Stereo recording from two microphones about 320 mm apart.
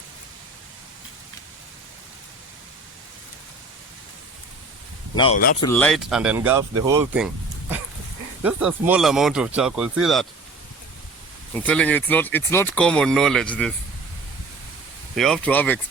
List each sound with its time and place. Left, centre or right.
5.1 s speech: centre
8.4 s speech: centre
11.6 s speech: centre
15.1 s speech: centre